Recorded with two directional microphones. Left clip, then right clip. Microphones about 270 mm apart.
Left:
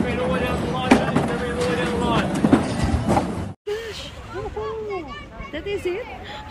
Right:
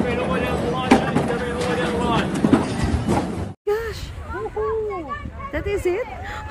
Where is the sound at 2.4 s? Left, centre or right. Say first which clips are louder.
Even; centre.